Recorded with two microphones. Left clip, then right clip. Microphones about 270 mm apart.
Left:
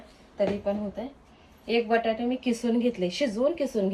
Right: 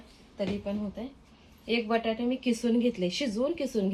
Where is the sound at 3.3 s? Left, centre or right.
Centre.